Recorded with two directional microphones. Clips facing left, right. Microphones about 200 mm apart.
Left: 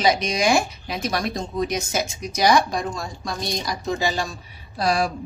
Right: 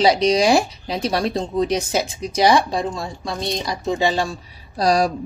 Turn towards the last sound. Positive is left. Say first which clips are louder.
# right 4 dB
turn(degrees=-40)  # may be behind; listen again after turning